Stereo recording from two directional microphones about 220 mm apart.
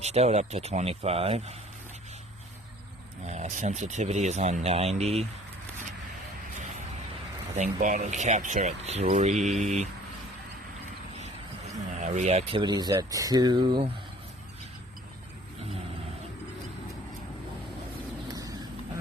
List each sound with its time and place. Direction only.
0.0 s speech: 30° right (ahead or behind)
3.2 s speech: 30° right (ahead or behind)
7.5 s speech: 35° right (ahead or behind)
12.0 s speech: 30° right (ahead or behind)
18.3 s vehicle: 15° right (ahead or behind)